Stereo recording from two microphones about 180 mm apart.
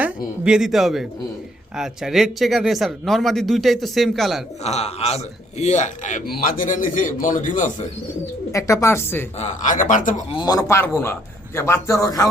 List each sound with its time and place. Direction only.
0.4 s speech: 5° right (ahead or behind)
4.6 s a man's voice: 35° left (ahead or behind)
8.5 s a man's voice: 15° left (ahead or behind)
9.4 s a man's voice: 45° left (ahead or behind)
10.3 s a man's voice: 20° left (ahead or behind)